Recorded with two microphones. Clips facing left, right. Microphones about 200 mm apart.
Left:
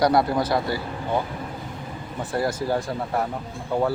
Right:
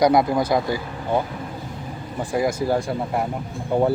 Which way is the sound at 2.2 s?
10° right (ahead or behind).